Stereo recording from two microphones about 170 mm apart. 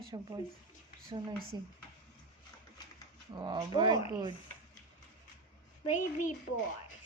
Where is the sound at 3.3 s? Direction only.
25° right (ahead or behind).